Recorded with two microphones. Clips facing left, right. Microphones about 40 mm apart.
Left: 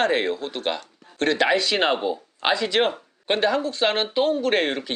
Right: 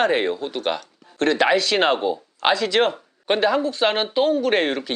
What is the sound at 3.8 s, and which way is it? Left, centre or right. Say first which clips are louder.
Speech: right 1 dB; centre.